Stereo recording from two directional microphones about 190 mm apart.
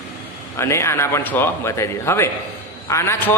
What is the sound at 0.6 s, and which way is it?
A man's voice, 15° left (ahead or behind).